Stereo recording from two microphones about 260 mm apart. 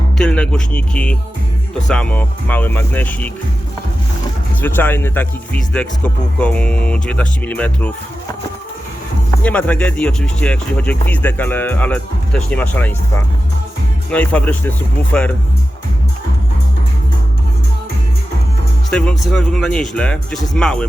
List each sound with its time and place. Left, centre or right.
0.2 s speech: centre
4.6 s speech: centre
9.4 s speech: centre
18.9 s speech: centre